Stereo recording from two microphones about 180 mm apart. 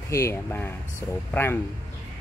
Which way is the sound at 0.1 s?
15° left (ahead or behind).